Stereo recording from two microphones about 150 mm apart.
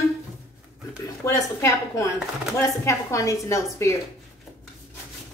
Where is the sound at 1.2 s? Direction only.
20° left (ahead or behind).